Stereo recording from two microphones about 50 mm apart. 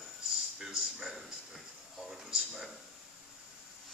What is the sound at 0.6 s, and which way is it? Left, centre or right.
Speech, centre.